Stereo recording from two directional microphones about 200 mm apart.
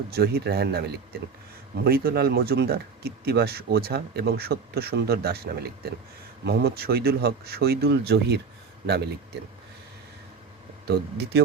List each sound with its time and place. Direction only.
0.1 s speech: 50° right (ahead or behind)
10.8 s speech: 55° right (ahead or behind)